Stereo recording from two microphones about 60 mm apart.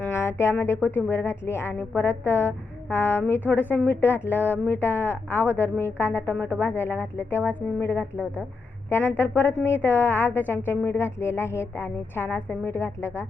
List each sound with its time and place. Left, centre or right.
0.2 s music: left
0.6 s a woman's voice: left